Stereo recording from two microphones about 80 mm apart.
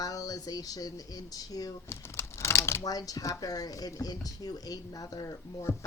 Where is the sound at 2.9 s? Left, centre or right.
Left.